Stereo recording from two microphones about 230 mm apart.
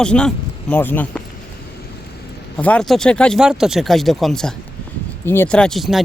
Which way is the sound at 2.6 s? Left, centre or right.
Centre.